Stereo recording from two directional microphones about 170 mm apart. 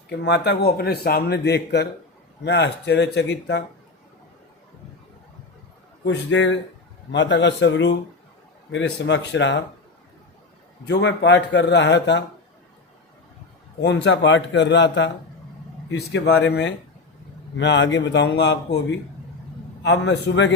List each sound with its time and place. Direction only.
0.1 s speech: 85° left
2.4 s speech: 90° left
6.1 s a man's voice: 90° left
10.8 s a man's voice: 90° left
13.8 s a man's voice: 90° left